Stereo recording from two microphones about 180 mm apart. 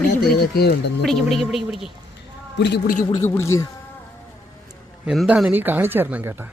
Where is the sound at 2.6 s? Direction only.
65° left (ahead or behind); by 3.1 s 45° left (ahead or behind).